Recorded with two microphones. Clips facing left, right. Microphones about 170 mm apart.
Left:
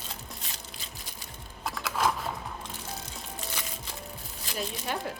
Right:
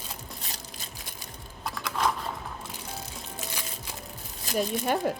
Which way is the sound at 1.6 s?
Centre (ahead or behind).